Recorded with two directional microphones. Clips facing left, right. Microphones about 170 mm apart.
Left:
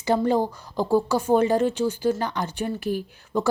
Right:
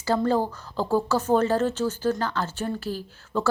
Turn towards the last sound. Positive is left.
turn(degrees=15)  # may be behind; listen again after turning